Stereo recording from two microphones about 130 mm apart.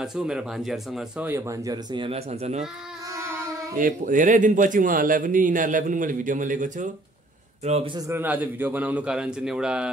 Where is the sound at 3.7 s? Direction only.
90° right.